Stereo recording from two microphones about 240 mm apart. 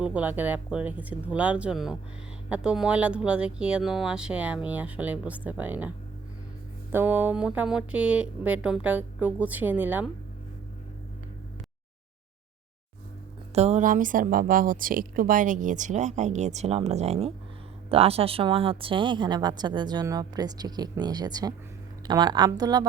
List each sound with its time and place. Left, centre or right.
0.0 s speech: centre
6.9 s speech: centre
13.5 s a woman's voice: right